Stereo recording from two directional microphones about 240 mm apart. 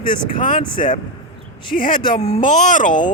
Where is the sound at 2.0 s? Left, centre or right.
Centre.